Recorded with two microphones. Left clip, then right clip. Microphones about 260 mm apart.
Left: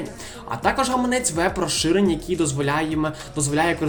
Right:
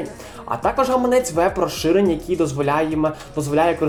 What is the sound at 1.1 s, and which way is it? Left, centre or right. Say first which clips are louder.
Speech: right 5 dB; left.